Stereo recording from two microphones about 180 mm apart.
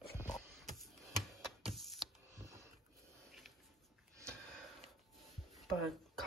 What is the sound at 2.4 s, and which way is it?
Printer, 15° right (ahead or behind).